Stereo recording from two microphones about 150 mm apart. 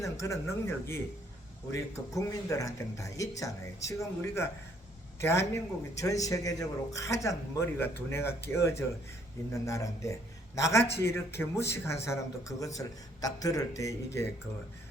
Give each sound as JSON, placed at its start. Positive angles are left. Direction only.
{"t": 0.0, "sound": "speech", "side_deg": 20}